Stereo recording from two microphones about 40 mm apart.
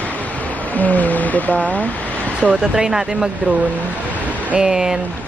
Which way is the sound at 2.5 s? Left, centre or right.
Centre.